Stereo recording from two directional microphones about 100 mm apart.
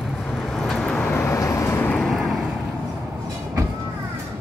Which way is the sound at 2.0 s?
Centre (ahead or behind).